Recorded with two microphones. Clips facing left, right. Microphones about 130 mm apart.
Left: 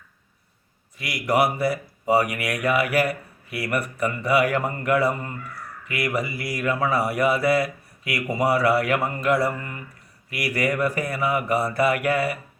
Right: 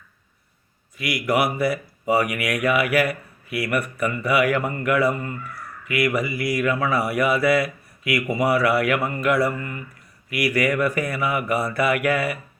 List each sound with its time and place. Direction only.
0.9 s speech: 35° left (ahead or behind)